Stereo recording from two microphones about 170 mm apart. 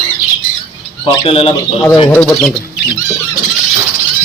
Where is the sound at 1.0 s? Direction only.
30° left (ahead or behind).